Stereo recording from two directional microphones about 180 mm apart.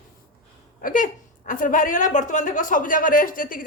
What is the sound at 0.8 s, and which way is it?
A woman's voice, 50° left (ahead or behind).